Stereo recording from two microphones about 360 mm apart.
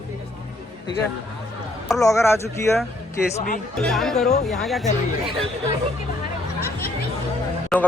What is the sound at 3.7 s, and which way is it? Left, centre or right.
Speech, centre.